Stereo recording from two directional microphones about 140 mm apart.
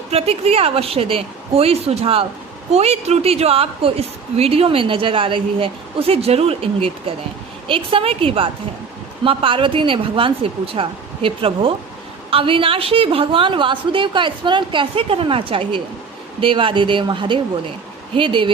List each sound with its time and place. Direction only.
0.1 s a woman's voice: 45° right (ahead or behind)